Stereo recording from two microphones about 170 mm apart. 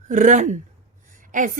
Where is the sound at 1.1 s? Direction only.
50° right (ahead or behind).